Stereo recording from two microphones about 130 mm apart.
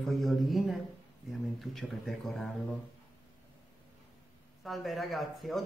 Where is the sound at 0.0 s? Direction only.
Centre (ahead or behind).